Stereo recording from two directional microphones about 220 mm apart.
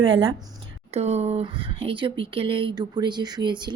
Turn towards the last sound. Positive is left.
turn(degrees=-20)  # may be behind; listen again after turning